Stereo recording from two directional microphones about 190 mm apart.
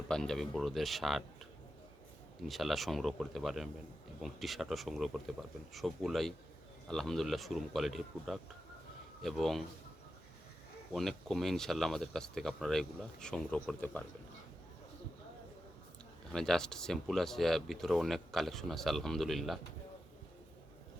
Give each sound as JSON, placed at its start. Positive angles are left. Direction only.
{"t": 0.1, "sound": "speech", "side_deg": 5}
{"t": 2.5, "sound": "speech", "side_deg": 0}
{"t": 10.9, "sound": "speech", "side_deg": 0}
{"t": 16.3, "sound": "speech", "side_deg": 5}